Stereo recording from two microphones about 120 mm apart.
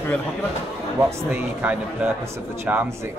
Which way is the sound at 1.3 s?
15° right (ahead or behind).